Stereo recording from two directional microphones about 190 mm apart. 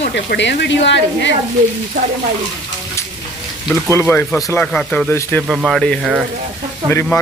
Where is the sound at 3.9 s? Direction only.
10° left (ahead or behind).